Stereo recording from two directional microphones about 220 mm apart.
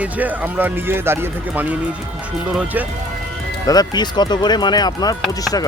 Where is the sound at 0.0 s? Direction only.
5° right (ahead or behind).